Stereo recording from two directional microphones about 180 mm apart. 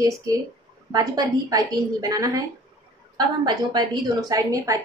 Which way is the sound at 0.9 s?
20° right (ahead or behind).